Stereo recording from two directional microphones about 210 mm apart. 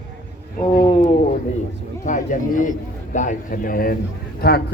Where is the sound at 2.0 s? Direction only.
35° left (ahead or behind).